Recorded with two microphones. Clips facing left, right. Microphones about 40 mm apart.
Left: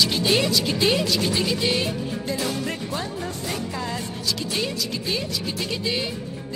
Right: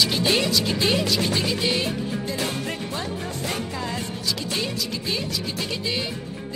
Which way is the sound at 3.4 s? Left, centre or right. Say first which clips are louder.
Right 2 dB; right.